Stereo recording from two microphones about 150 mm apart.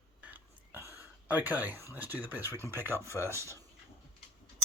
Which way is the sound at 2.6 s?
15° right (ahead or behind).